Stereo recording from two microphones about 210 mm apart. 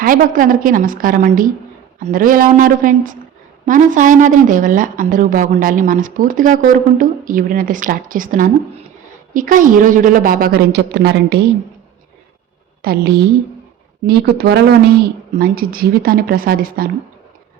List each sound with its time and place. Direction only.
0.0 s a woman's voice: 40° right (ahead or behind)
12.8 s speech: 45° right (ahead or behind)